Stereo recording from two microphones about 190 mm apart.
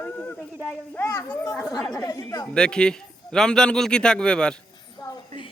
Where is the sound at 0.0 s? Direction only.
10° left (ahead or behind).